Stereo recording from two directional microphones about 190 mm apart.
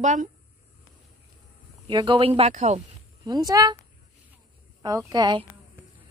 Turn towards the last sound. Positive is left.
turn(degrees=-25)  # may be behind; listen again after turning